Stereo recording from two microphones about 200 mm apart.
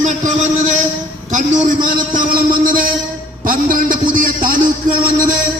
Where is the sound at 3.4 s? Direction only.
45° right (ahead or behind).